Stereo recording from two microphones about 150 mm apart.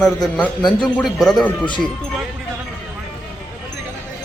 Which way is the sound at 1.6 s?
30° left (ahead or behind).